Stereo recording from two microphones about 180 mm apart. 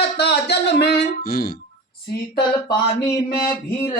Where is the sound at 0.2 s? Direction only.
70° left (ahead or behind).